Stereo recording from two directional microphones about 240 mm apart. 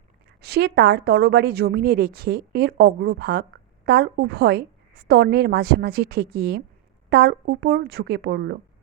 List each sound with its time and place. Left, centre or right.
0.4 s a woman's voice: right